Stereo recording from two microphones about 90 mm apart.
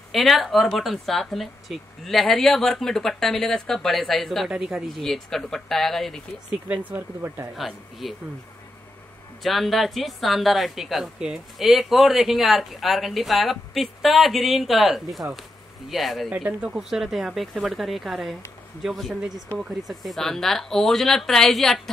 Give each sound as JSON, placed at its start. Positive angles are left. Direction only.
{"t": 0.1, "sound": "a woman's voice", "side_deg": 0}
{"t": 4.5, "sound": "speech", "side_deg": -10}
{"t": 5.0, "sound": "a woman's voice", "side_deg": 5}
{"t": 6.7, "sound": "speech", "side_deg": -20}
{"t": 7.5, "sound": "a woman's voice", "side_deg": 0}
{"t": 9.4, "sound": "a woman's voice", "side_deg": 0}